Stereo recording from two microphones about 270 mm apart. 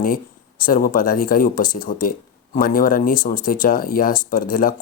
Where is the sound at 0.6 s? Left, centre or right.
Left.